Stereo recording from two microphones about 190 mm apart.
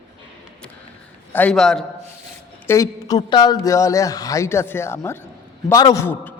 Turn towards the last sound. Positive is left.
turn(degrees=15)  # may be behind; listen again after turning